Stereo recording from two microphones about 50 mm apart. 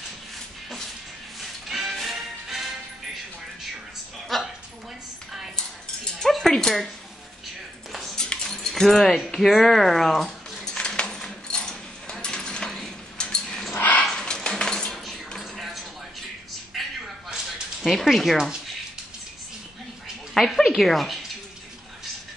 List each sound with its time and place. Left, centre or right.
0.7 s music: centre
4.3 s dog: centre
6.1 s dog: centre
8.2 s dog: centre
8.6 s speech: centre
9.3 s a sound: centre
13.2 s dog: centre
13.7 s dog: left
14.1 s dog: centre
14.9 s a sound: centre
17.3 s a sound: centre
20.3 s speech: centre